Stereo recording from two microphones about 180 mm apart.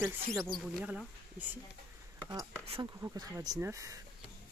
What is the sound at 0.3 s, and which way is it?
Speech, centre (ahead or behind).